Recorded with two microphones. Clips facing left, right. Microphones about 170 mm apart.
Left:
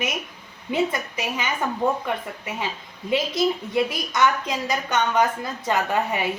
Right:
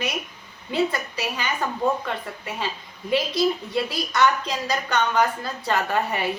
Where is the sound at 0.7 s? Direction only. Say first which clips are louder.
Even; 20° left (ahead or behind).